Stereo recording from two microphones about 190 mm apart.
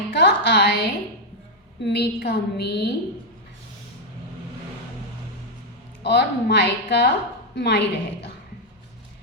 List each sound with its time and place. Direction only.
0.1 s a woman's voice: 65° left (ahead or behind)
6.0 s a woman's voice: 60° left (ahead or behind)